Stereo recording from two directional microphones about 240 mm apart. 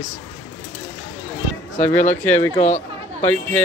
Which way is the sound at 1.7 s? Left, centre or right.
Left.